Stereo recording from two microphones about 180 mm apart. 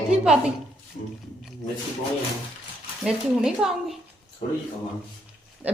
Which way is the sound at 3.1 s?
5° right (ahead or behind).